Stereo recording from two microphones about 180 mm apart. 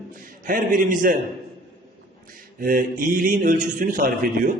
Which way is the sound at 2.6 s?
50° right (ahead or behind).